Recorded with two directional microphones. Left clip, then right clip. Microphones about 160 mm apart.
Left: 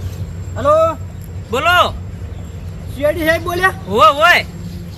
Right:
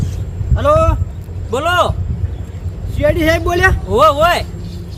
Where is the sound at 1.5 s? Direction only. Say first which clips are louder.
Left 2 dB; 35° right (ahead or behind).